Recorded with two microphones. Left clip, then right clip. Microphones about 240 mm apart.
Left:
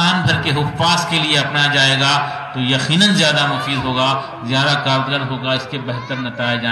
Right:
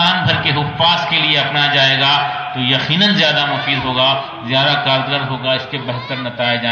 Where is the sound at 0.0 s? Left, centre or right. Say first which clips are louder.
Right 2 dB; left.